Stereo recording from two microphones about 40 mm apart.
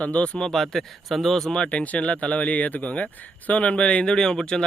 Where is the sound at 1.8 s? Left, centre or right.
Left.